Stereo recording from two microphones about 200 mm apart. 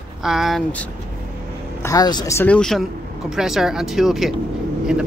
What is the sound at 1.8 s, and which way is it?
Speech, 20° left (ahead or behind).